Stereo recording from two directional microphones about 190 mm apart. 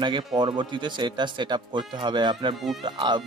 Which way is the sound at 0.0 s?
25° right (ahead or behind).